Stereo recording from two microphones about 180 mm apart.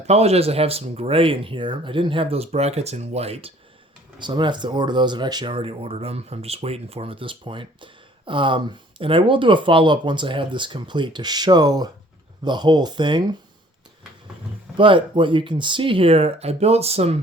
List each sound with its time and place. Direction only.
0.1 s speech: 35° right (ahead or behind)
14.8 s speech: 25° right (ahead or behind)